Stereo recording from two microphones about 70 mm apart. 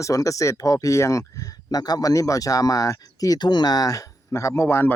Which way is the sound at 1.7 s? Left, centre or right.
Left.